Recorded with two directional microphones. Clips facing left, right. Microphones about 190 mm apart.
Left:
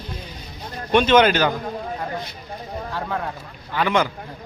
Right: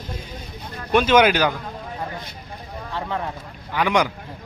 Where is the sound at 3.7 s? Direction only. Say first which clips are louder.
Even; 15° right (ahead or behind).